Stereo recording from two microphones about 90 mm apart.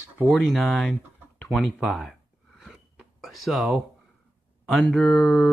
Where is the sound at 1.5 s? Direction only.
Centre (ahead or behind).